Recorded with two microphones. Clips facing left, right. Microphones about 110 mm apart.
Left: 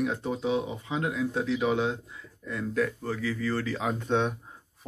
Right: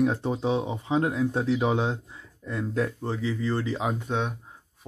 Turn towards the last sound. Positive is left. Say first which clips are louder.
# left 2 dB
turn(degrees=-5)  # may be behind; listen again after turning